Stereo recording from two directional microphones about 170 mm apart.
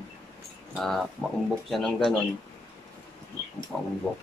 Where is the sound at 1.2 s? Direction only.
5° left (ahead or behind).